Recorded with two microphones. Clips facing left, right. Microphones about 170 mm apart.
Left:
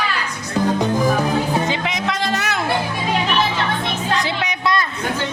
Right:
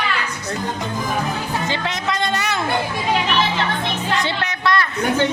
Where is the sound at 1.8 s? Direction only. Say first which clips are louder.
Left 1 dB; centre (ahead or behind).